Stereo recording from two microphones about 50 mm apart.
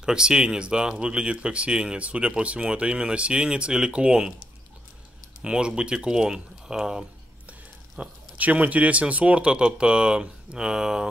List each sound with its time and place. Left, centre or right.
0.0 s speech: centre
5.4 s speech: centre
8.0 s speech: right; by 11.1 s centre